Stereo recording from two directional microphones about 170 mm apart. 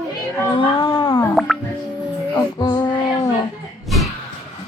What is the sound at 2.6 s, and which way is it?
Child singing, 25° left (ahead or behind).